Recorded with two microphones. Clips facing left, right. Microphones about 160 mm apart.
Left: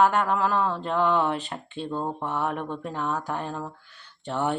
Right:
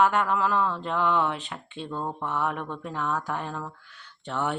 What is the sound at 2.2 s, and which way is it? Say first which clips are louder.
Mantra: left 1 dB; 35° left (ahead or behind).